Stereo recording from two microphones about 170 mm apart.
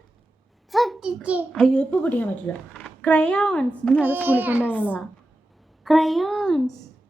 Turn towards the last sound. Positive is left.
turn(degrees=0)  # may be behind; listen again after turning